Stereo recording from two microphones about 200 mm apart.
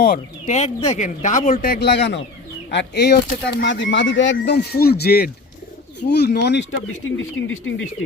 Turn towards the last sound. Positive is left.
turn(degrees=70)  # may be behind; listen again after turning